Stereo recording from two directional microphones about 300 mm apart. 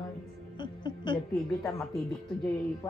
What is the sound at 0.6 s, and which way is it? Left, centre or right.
Speech, centre.